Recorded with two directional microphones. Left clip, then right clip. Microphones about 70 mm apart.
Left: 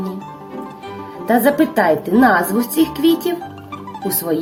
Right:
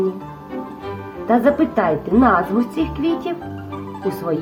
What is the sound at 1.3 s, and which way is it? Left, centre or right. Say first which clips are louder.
A woman's voice: left 1 dB; centre.